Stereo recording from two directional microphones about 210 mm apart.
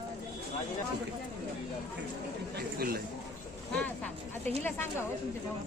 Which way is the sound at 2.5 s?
45° right (ahead or behind).